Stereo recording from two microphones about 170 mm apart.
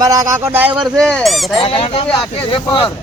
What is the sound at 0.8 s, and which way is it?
Speech, 5° left (ahead or behind).